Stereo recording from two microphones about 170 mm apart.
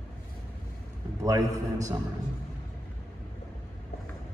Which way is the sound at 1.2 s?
20° right (ahead or behind).